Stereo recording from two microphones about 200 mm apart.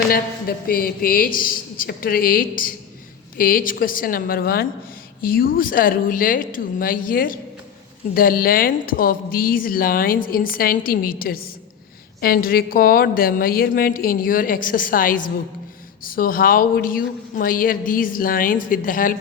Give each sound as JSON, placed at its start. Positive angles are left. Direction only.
{"t": 0.1, "sound": "a woman's voice", "side_deg": 45}